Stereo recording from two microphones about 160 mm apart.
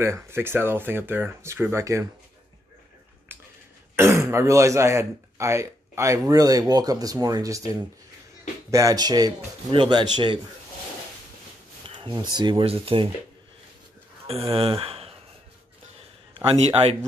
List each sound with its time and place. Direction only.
0.0 s speech: 15° right (ahead or behind)
3.3 s a sound: 10° right (ahead or behind)
3.9 s a man's voice: 15° right (ahead or behind)
11.9 s a sound: 30° right (ahead or behind)
12.4 s speech: 30° right (ahead or behind)
14.5 s speech: 35° right (ahead or behind)
16.5 s speech: 40° right (ahead or behind)